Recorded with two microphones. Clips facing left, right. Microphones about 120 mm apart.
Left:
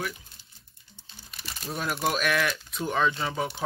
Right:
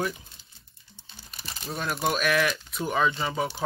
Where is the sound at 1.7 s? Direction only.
Centre (ahead or behind).